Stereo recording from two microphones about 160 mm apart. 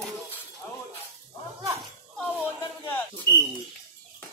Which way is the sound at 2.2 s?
10° left (ahead or behind).